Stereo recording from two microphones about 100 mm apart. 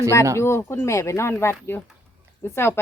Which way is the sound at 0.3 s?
25° left (ahead or behind).